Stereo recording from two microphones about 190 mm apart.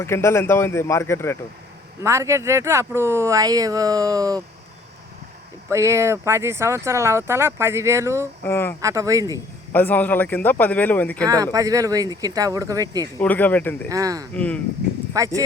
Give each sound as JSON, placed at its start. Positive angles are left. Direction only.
{"t": 0.0, "sound": "speech", "side_deg": 15}
{"t": 2.0, "sound": "speech", "side_deg": -15}
{"t": 5.7, "sound": "speech", "side_deg": -15}
{"t": 8.4, "sound": "speech", "side_deg": 10}
{"t": 8.8, "sound": "speech", "side_deg": -15}
{"t": 9.7, "sound": "speech", "side_deg": 10}
{"t": 11.5, "sound": "speech", "side_deg": -20}
{"t": 13.1, "sound": "speech", "side_deg": 10}
{"t": 13.8, "sound": "speech", "side_deg": -20}
{"t": 14.3, "sound": "speech", "side_deg": 5}
{"t": 15.1, "sound": "speech", "side_deg": -15}